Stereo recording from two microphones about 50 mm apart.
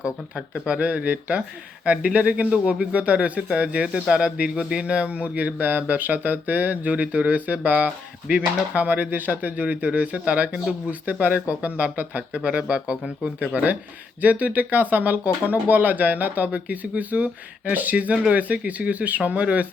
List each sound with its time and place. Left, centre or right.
0.3 s speech: right